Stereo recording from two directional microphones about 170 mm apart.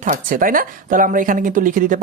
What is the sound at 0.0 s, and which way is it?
Speech, 50° right (ahead or behind).